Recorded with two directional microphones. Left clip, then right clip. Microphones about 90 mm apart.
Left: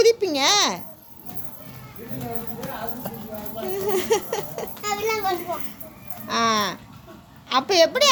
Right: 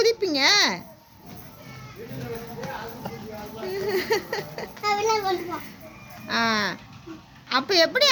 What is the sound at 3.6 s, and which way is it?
Speech, 15° right (ahead or behind).